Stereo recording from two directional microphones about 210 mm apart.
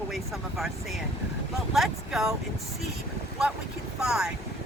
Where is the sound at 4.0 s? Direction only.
5° right (ahead or behind).